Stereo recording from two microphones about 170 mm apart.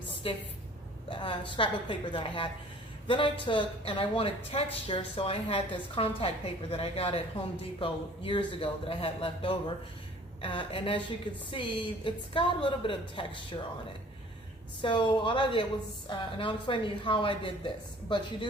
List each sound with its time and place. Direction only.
0.2 s a woman's voice: 35° left (ahead or behind)
14.8 s a woman's voice: 30° left (ahead or behind)